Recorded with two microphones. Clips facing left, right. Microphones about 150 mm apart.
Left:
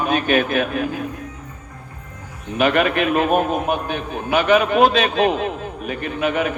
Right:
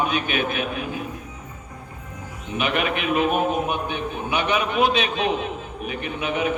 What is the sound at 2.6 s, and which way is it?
A man's voice, 45° left (ahead or behind).